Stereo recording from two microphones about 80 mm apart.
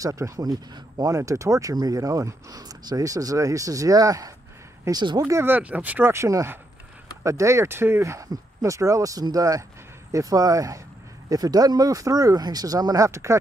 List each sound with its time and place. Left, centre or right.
0.0 s speech: right
1.1 s speech: right
4.9 s speech: right
5.2 s speech: right
5.6 s speech: centre; by 13.4 s right